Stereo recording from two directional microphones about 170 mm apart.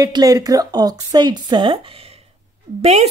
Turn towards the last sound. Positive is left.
turn(degrees=-40)  # may be behind; listen again after turning